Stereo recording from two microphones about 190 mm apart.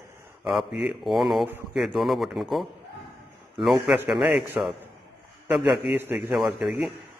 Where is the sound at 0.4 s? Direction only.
Centre (ahead or behind).